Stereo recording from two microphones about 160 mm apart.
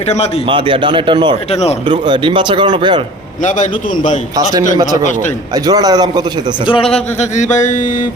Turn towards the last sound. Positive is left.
turn(degrees=50)  # may be behind; listen again after turning